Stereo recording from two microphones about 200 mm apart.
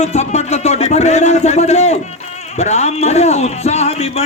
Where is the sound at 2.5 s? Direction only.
35° left (ahead or behind).